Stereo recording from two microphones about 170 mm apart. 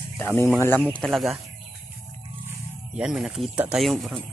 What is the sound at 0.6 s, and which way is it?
Speech, 15° left (ahead or behind).